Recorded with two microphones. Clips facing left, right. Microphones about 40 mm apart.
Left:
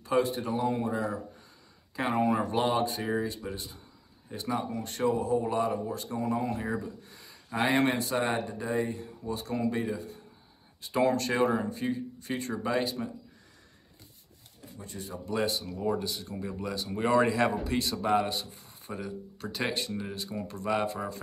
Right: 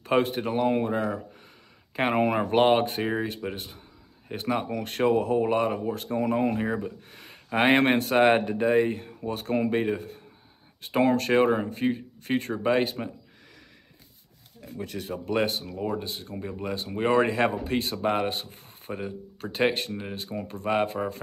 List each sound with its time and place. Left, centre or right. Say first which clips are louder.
0.0 s speech: right 3 dB; right
14.6 s speech: right 7 dB; right